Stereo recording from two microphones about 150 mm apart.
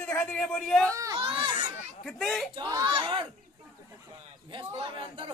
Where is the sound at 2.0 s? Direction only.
5° left (ahead or behind).